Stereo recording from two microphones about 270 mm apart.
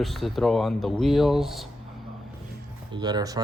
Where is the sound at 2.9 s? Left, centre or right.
Centre.